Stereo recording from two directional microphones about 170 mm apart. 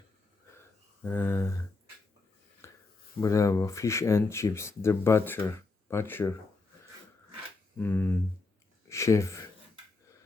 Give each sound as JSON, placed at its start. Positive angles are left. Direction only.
{"t": 1.0, "sound": "speech", "side_deg": 10}
{"t": 2.6, "sound": "a sound", "side_deg": 15}
{"t": 3.2, "sound": "speech", "side_deg": 20}
{"t": 7.8, "sound": "speech", "side_deg": 10}